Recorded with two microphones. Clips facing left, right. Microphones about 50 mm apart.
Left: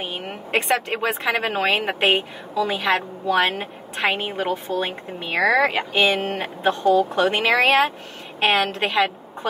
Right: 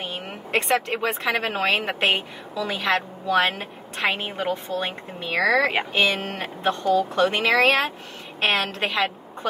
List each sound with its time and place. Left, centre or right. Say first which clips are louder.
0.0 s speech: left 2 dB; centre
0.9 s a woman's voice: left 2 dB; centre
1.3 s a woman's voice: left 2 dB; centre
5.2 s a woman's voice: left 2 dB; centre